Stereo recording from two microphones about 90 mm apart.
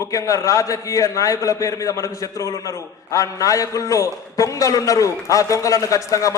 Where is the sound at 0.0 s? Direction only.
40° left (ahead or behind).